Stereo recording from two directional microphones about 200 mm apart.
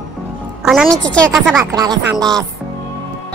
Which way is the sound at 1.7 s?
20° right (ahead or behind).